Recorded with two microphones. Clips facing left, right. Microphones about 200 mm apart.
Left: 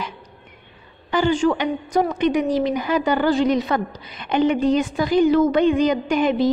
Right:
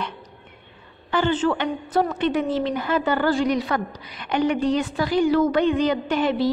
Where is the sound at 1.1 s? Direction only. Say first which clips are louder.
Left 3 dB; 15° left (ahead or behind).